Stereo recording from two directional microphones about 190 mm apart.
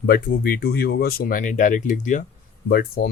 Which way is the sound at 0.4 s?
55° left (ahead or behind).